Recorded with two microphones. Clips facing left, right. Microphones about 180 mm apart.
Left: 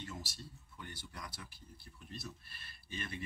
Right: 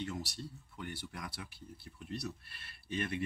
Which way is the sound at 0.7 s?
60° right (ahead or behind).